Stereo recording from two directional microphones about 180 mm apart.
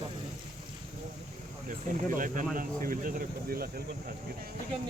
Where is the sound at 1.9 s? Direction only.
50° right (ahead or behind).